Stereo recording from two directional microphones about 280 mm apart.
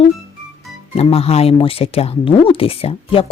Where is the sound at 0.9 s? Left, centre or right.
Left.